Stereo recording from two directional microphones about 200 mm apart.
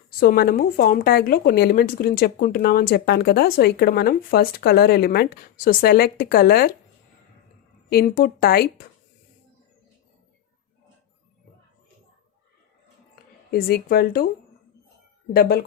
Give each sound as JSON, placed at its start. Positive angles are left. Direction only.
{"t": 0.2, "sound": "a woman's voice", "side_deg": 50}
{"t": 7.9, "sound": "a woman's voice", "side_deg": 50}
{"t": 13.5, "sound": "a woman's voice", "side_deg": 50}
{"t": 15.3, "sound": "a woman's voice", "side_deg": 50}